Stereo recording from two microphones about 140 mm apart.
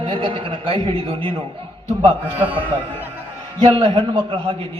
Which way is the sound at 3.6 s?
35° right (ahead or behind).